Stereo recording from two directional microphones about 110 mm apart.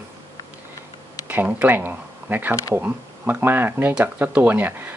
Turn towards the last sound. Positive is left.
turn(degrees=-15)  # may be behind; listen again after turning